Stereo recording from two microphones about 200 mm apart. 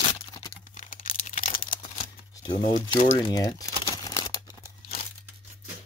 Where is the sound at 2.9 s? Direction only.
20° left (ahead or behind).